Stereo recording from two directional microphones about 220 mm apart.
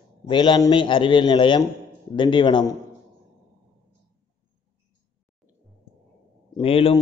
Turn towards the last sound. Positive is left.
turn(degrees=25)  # may be behind; listen again after turning